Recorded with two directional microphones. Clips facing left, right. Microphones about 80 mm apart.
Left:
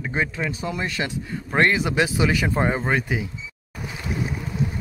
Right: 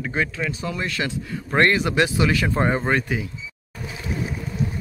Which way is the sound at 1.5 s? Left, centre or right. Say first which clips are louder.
Right 1 dB; centre.